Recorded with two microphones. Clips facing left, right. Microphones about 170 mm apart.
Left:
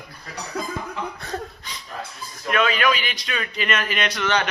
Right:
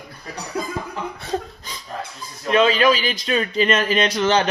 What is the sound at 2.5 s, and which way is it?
A man's voice, 30° right (ahead or behind).